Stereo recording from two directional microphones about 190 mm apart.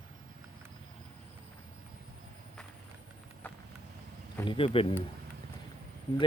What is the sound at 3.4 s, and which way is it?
Vehicle, 10° left (ahead or behind).